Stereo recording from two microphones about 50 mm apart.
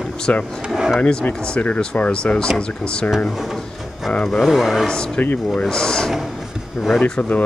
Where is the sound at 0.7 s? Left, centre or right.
Centre.